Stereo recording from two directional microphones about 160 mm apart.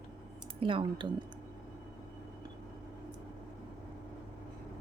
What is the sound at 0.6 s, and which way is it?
Speech, 35° right (ahead or behind).